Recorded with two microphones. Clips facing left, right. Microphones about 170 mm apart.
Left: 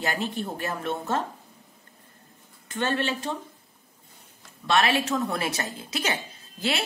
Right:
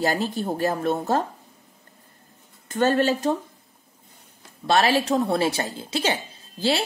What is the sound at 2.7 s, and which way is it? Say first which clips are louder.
Speech: right 7 dB; 40° right (ahead or behind).